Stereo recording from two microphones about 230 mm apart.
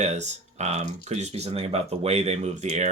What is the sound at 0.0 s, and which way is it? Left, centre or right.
Speech, right.